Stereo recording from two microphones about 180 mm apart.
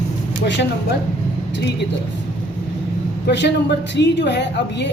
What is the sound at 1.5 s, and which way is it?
Speech, 70° left (ahead or behind).